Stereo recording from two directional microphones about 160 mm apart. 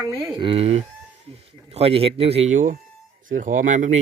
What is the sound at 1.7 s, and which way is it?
Speech, 40° right (ahead or behind).